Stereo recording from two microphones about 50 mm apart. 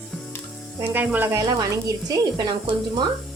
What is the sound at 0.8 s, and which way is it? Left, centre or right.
Speech, right.